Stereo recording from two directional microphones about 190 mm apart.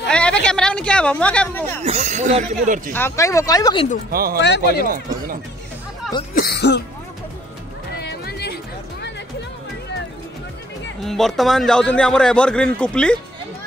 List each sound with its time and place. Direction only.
0.1 s a sound: 5° left (ahead or behind)
1.9 s speech: 35° right (ahead or behind)
2.9 s speech: 15° left (ahead or behind)
4.1 s speech: 50° right (ahead or behind)
4.4 s speech: 65° left (ahead or behind)
4.8 s speech: 50° right (ahead or behind)
6.3 s speech: 55° left (ahead or behind)
8.0 s music: 60° left (ahead or behind)
11.0 s a man's voice: centre (ahead or behind)